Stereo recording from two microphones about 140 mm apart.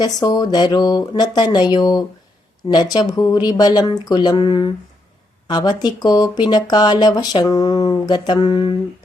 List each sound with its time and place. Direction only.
0.0 s speech: 30° left (ahead or behind)